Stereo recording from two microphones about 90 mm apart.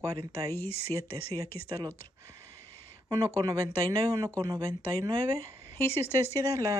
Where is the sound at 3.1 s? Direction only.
35° right (ahead or behind).